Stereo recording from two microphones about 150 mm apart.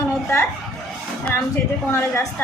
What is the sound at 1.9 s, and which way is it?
Speech, 15° left (ahead or behind).